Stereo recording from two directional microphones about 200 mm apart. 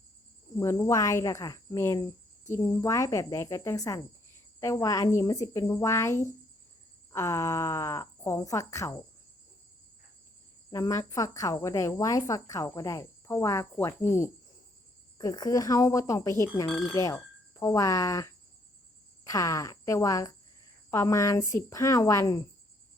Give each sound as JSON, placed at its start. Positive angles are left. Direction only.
{"t": 0.6, "sound": "speech", "side_deg": 15}
{"t": 10.7, "sound": "speech", "side_deg": 15}